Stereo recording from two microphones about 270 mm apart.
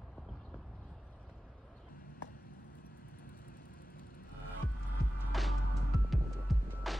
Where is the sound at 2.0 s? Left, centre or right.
Left.